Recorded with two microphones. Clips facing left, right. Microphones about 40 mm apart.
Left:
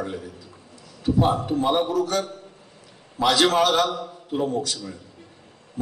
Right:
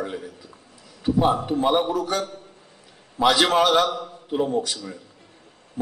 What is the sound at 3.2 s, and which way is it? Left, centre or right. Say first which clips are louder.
A man's voice: right 1 dB; centre.